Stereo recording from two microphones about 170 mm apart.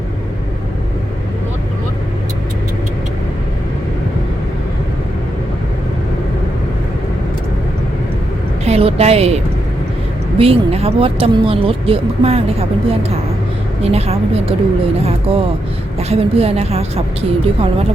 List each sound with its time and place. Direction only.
8.6 s a woman's voice: 40° right (ahead or behind)